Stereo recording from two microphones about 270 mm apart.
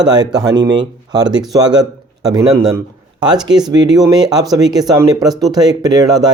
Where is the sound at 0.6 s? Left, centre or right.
Right.